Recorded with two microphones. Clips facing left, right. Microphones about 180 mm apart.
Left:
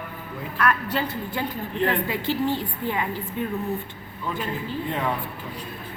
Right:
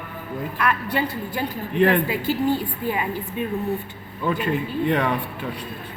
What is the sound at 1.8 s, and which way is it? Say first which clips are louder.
Speech: right 6 dB; 70° right (ahead or behind).